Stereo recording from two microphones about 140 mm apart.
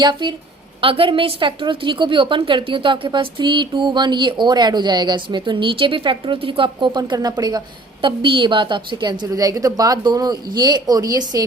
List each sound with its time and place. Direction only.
0.0 s a woman's voice: 35° right (ahead or behind)